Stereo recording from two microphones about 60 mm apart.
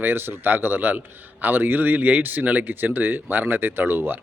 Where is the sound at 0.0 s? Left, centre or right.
Right.